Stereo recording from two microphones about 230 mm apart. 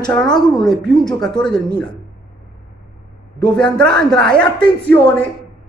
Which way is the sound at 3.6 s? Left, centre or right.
Centre.